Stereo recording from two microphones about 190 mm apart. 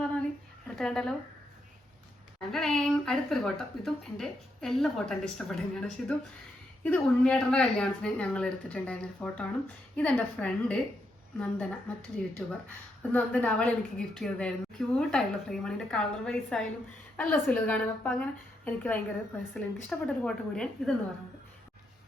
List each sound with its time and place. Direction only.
0.0 s a sound: 5° left (ahead or behind)
0.8 s speech: 5° left (ahead or behind)
2.5 s a woman's voice: centre (ahead or behind)
12.2 s speech: 45° left (ahead or behind)
12.6 s a woman's voice: 5° left (ahead or behind)